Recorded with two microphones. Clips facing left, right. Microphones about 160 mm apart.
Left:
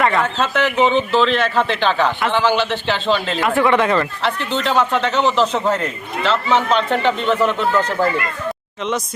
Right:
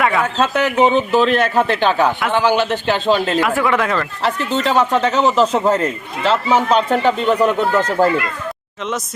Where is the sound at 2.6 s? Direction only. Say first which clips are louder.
Right 2 dB; 45° right (ahead or behind).